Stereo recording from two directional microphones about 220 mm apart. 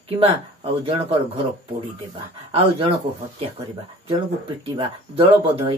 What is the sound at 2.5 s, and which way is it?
Speech, 25° right (ahead or behind).